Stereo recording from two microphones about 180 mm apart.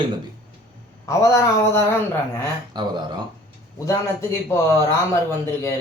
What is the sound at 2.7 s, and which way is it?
Speech, 25° right (ahead or behind).